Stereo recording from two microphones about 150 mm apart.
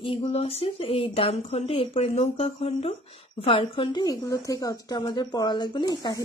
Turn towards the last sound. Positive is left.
turn(degrees=30)  # may be behind; listen again after turning